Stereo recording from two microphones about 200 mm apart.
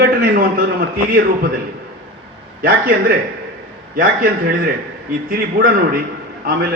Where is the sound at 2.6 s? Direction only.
45° right (ahead or behind).